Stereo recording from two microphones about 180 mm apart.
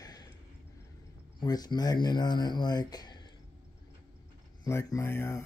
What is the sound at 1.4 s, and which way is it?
Speech, 20° left (ahead or behind).